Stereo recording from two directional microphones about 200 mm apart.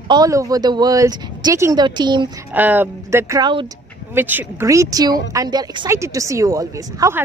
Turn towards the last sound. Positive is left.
turn(degrees=-15)  # may be behind; listen again after turning